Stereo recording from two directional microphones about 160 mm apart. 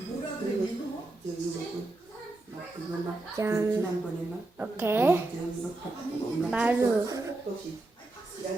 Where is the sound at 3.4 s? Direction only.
20° right (ahead or behind).